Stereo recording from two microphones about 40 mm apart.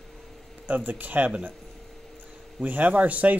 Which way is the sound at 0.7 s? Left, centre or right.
Right.